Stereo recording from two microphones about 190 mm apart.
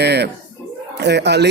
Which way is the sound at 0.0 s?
60° right (ahead or behind).